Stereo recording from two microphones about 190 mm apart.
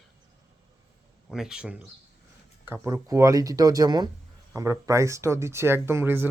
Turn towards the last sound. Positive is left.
turn(degrees=-10)  # may be behind; listen again after turning